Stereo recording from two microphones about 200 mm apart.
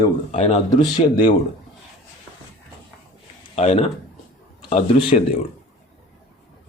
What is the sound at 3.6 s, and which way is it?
A man's voice, 30° left (ahead or behind).